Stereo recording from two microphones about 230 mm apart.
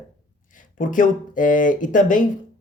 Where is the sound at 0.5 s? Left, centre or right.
Left.